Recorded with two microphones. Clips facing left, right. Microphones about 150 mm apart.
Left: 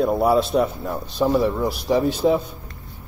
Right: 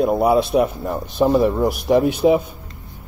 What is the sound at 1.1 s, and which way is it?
Speech, 20° right (ahead or behind).